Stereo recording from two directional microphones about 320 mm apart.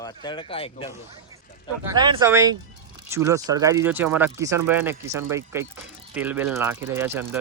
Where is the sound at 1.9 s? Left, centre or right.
Centre.